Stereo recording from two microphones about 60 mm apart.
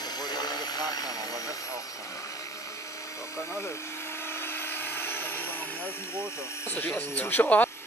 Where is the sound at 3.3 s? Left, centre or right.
Left.